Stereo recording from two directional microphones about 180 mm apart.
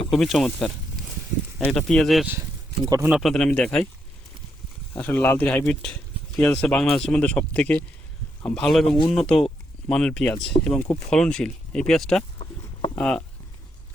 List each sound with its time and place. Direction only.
0.1 s speech: centre (ahead or behind)
2.8 s speech: 20° right (ahead or behind)
3.1 s speech: centre (ahead or behind)
4.9 s speech: 10° left (ahead or behind)